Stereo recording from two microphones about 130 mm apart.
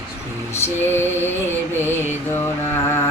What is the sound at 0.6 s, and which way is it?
Lullaby, 15° left (ahead or behind).